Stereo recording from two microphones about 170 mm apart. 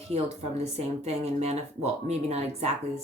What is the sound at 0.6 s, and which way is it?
Speech, 40° right (ahead or behind).